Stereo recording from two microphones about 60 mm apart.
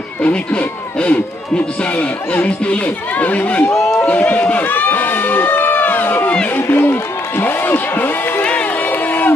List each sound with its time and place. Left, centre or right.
0.2 s speech: left
2.4 s speech: centre
3.7 s speech: centre
4.0 s speech: left
4.6 s a sound: left
6.5 s a man's voice: left
8.5 s run: left